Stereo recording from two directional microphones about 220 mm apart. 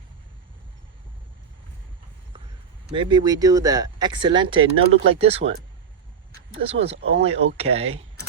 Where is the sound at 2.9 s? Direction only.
20° right (ahead or behind).